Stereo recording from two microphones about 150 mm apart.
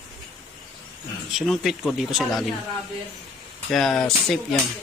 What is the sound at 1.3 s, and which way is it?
Speech, centre (ahead or behind).